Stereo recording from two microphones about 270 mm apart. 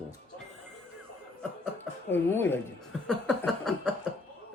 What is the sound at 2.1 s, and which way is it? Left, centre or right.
Speech, centre.